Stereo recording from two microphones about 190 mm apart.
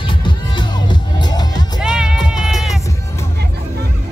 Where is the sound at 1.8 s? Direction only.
5° right (ahead or behind).